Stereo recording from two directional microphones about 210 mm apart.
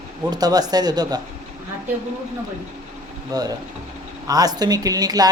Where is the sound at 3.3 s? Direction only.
20° right (ahead or behind).